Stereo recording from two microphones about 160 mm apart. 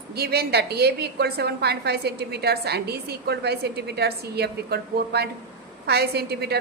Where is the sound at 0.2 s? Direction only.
85° right.